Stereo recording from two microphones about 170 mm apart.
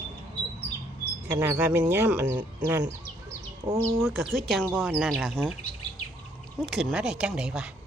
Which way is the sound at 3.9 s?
Centre (ahead or behind).